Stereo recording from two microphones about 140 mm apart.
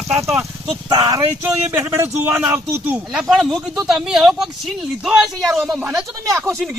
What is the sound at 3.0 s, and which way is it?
Speech, centre (ahead or behind).